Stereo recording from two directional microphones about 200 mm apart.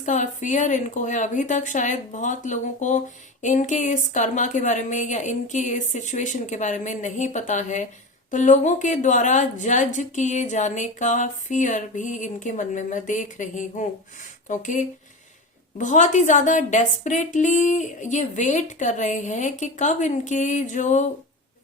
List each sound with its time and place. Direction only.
0.0 s a woman's voice: 35° left (ahead or behind)